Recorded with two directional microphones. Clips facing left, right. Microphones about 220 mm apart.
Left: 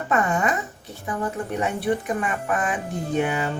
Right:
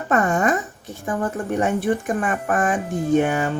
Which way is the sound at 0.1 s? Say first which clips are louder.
Right 4 dB; 45° right (ahead or behind).